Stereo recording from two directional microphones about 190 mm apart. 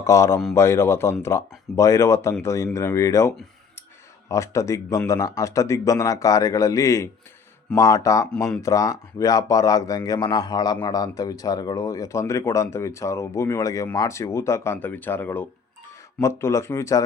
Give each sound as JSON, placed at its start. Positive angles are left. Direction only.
{"t": 0.0, "sound": "a man's voice", "side_deg": 15}